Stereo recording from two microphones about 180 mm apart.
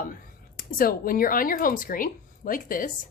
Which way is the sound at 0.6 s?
55° left (ahead or behind).